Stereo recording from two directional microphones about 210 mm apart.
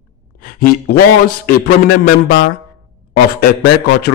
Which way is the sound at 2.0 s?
45° left (ahead or behind).